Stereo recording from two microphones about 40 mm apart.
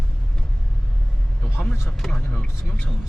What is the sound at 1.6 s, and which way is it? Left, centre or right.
Speech, centre.